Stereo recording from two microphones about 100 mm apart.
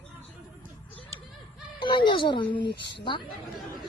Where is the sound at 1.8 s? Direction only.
50° left (ahead or behind).